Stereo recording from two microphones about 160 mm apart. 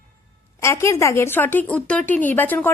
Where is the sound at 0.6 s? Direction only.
15° left (ahead or behind).